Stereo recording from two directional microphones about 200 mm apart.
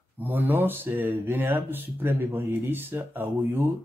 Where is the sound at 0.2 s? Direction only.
10° right (ahead or behind).